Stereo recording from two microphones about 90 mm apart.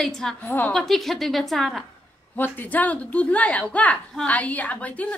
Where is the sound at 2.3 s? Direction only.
20° left (ahead or behind).